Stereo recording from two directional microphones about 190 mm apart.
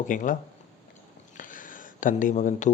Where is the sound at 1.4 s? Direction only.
45° left (ahead or behind).